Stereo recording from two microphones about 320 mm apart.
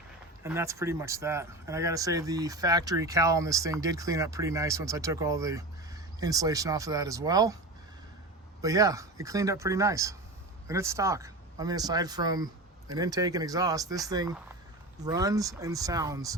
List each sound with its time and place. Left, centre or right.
0.4 s speech: centre
8.6 s speech: centre